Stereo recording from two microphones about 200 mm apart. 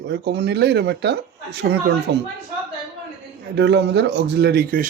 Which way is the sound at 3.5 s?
60° right (ahead or behind).